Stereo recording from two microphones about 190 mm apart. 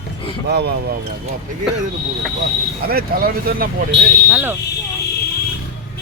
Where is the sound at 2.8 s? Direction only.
50° right (ahead or behind).